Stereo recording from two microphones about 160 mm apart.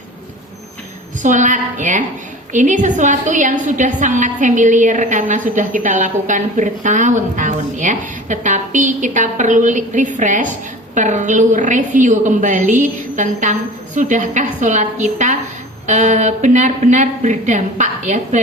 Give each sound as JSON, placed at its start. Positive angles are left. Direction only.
{"t": 1.2, "sound": "a woman's voice", "side_deg": -50}